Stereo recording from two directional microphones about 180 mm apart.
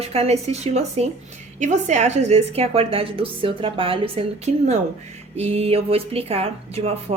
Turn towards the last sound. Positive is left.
turn(degrees=-35)  # may be behind; listen again after turning